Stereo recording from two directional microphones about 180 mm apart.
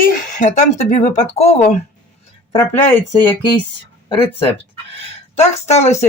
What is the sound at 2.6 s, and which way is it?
Speech, 15° left (ahead or behind).